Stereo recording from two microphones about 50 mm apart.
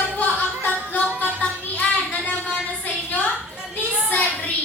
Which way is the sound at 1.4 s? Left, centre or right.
Left.